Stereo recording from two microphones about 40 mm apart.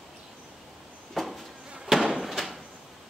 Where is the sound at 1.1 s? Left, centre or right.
Centre.